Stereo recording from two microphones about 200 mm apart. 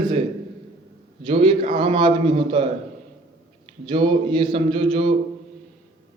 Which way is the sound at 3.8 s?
25° right (ahead or behind).